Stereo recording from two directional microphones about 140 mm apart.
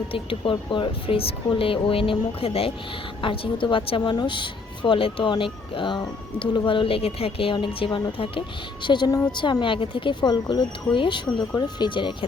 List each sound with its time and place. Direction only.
0.1 s a woman's voice: 40° left (ahead or behind)